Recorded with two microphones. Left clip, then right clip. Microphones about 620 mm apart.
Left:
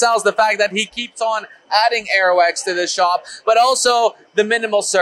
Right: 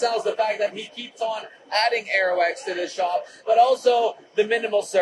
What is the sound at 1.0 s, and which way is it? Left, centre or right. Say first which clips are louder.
Speech: left 7 dB; left.